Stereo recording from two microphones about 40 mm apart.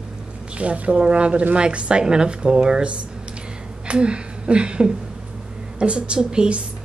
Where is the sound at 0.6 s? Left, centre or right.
Right.